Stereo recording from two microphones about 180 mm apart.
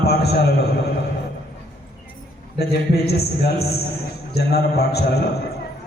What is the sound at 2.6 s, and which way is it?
A man's voice, 65° left (ahead or behind).